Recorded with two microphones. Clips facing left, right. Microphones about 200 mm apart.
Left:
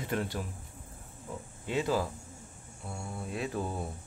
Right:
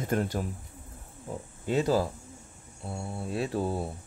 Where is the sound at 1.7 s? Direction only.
40° right (ahead or behind).